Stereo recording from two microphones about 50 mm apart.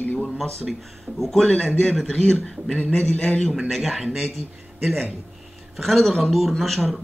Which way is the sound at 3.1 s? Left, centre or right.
Left.